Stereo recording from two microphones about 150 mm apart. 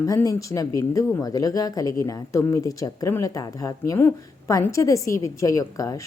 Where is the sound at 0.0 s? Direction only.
20° left (ahead or behind).